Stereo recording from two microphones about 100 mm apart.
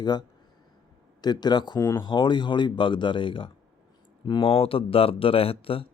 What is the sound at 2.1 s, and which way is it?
Speech, 50° left (ahead or behind).